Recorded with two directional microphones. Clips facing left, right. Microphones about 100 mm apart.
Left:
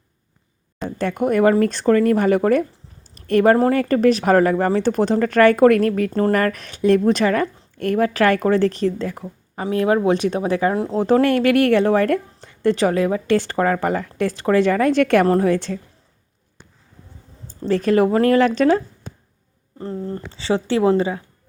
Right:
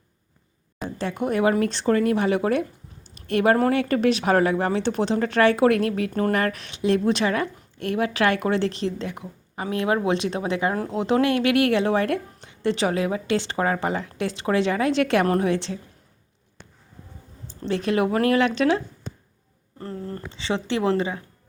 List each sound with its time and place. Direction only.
0.8 s a sound: 5° right (ahead or behind)
1.2 s a woman's voice: 45° left (ahead or behind)
6.1 s speech: 30° left (ahead or behind)
6.3 s a woman's voice: 45° left (ahead or behind)
10.2 s speech: 30° right (ahead or behind)
10.9 s a woman's voice: 40° left (ahead or behind)
17.7 s speech: 40° left (ahead or behind)
19.8 s speech: 25° left (ahead or behind)
20.3 s speech: 35° left (ahead or behind)